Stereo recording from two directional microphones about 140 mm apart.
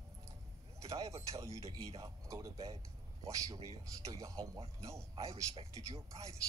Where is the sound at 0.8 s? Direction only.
20° right (ahead or behind).